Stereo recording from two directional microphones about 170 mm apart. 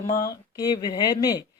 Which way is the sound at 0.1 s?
25° left (ahead or behind).